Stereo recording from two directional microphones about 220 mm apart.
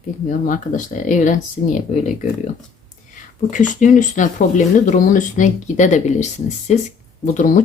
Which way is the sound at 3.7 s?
35° left (ahead or behind).